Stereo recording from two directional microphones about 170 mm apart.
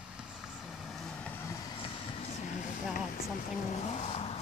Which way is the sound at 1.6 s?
30° left (ahead or behind).